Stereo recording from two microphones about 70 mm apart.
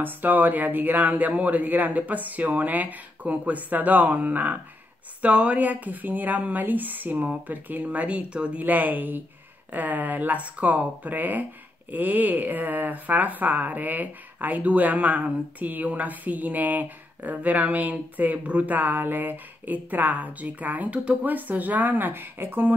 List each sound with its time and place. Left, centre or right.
0.0 s speech: right